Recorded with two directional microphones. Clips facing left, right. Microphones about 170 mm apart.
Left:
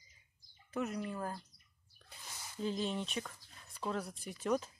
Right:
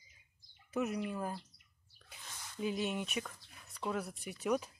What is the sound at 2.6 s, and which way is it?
Speech, 10° right (ahead or behind).